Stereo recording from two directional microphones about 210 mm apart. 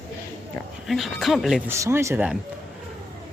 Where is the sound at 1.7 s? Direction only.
10° right (ahead or behind).